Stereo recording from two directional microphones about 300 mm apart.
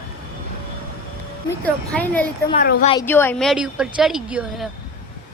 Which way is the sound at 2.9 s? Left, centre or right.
Centre.